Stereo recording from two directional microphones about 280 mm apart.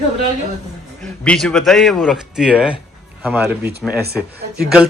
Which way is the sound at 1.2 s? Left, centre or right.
Centre.